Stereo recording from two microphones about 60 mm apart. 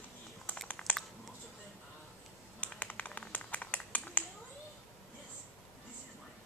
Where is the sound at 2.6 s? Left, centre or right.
Left.